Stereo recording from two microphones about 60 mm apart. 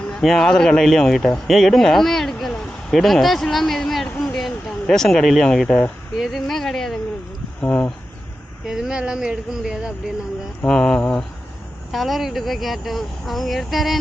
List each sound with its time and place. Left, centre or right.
0.1 s speech: centre
4.4 s a sound: centre
6.1 s speech: centre
7.6 s speech: left
8.6 s speech: centre
10.7 s speech: centre
11.9 s speech: centre